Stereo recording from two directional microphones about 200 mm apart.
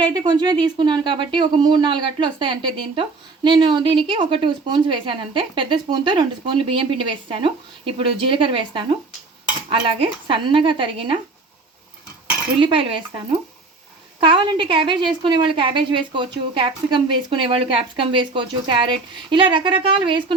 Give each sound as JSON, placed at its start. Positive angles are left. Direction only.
{"t": 0.1, "sound": "speech", "side_deg": -20}
{"t": 12.6, "sound": "speech", "side_deg": -25}
{"t": 14.2, "sound": "speech", "side_deg": -25}